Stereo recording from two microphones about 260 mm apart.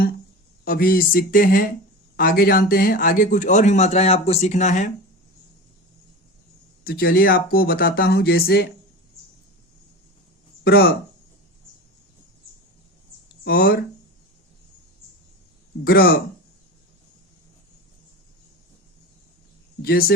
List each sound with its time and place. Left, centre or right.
0.6 s a man's voice: left
6.8 s speech: left
10.6 s speech: left
13.4 s speech: left
15.8 s speech: left
19.8 s speech: left